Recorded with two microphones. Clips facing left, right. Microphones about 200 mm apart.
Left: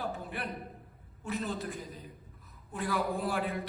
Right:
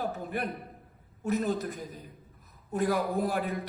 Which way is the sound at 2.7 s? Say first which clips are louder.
Right 5 dB; 45° right (ahead or behind).